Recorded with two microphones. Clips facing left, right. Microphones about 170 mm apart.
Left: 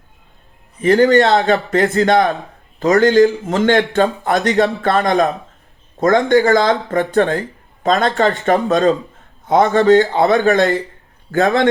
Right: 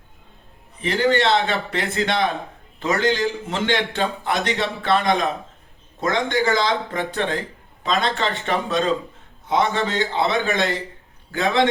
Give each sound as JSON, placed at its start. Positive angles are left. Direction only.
{"t": 0.8, "sound": "a man's voice", "side_deg": 45}